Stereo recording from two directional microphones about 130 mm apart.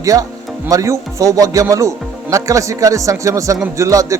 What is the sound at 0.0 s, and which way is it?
A man's voice, 25° right (ahead or behind).